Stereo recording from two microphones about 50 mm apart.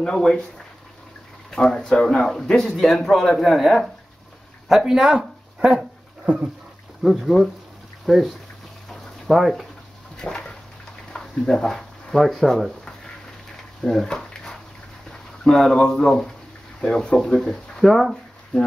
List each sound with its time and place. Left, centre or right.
0.0 s speech: centre
1.5 s speech: centre
7.0 s speech: centre
8.9 s a sound: centre
10.1 s a sound: centre
11.1 s speech: centre
12.1 s speech: centre
13.8 s a sound: centre
15.0 s speech: centre